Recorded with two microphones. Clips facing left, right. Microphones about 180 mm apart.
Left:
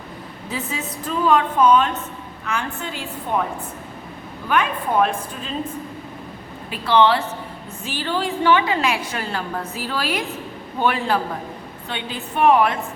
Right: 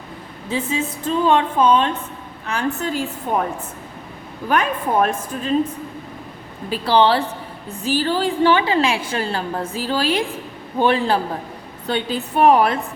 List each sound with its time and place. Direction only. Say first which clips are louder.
0.4 s a woman's voice: right 6 dB; 25° right (ahead or behind)
2.5 s a woman's voice: right 5 dB; 40° right (ahead or behind)
4.4 s a woman's voice: right 2 dB; 40° right (ahead or behind)
6.7 s a woman's voice: right 1 dB; 35° right (ahead or behind)